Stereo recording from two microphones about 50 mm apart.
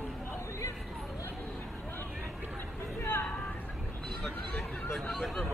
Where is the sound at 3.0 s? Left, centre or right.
Left.